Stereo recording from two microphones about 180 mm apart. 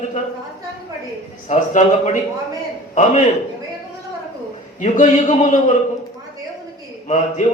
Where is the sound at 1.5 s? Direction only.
40° left (ahead or behind).